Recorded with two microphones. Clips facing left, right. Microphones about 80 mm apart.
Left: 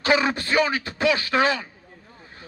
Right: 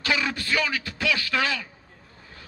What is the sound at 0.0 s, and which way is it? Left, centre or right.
Speech, left.